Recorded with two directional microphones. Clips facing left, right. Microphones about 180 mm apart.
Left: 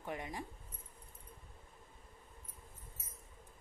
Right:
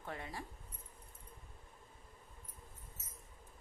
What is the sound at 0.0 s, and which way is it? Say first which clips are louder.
Speech: left 3 dB; 15° left (ahead or behind).